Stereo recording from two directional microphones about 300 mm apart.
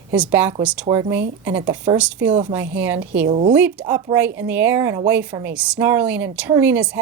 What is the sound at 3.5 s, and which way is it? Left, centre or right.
A woman's voice, centre.